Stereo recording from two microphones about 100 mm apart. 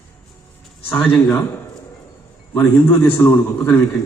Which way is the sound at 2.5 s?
20° left (ahead or behind).